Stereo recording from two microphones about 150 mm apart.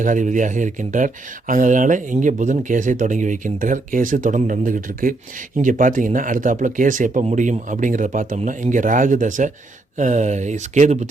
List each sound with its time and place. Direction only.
0.0 s speech: 60° right (ahead or behind)